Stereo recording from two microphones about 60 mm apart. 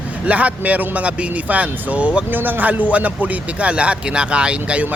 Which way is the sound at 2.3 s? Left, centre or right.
Right.